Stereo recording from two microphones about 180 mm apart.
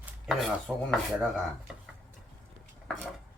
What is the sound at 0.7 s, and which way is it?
Rub, centre (ahead or behind).